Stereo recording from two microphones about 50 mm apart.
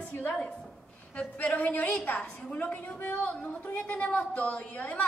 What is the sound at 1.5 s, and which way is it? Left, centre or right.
A woman's voice, left.